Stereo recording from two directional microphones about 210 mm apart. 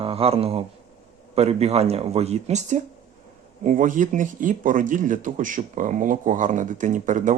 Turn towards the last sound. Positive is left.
turn(degrees=-35)  # may be behind; listen again after turning